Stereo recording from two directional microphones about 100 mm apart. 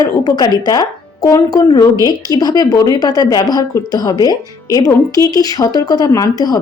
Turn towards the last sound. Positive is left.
turn(degrees=40)  # may be behind; listen again after turning